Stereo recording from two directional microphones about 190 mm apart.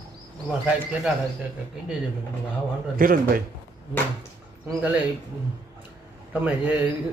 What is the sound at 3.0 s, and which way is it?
Speech, 50° right (ahead or behind).